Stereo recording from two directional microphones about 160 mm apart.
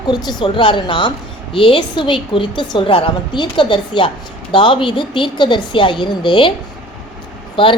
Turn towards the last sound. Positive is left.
turn(degrees=30)  # may be behind; listen again after turning